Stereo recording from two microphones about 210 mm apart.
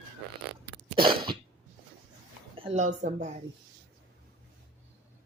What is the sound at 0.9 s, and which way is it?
Cough, 20° right (ahead or behind).